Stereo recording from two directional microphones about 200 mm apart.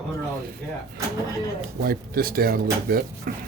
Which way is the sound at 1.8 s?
45° right (ahead or behind).